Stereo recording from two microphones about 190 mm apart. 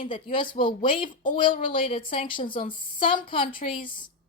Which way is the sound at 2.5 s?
45° left (ahead or behind).